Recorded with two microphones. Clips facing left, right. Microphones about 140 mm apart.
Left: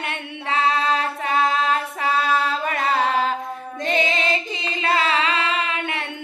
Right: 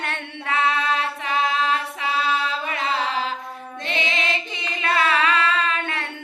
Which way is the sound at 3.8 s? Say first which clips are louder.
Left 5 dB; 40° left (ahead or behind).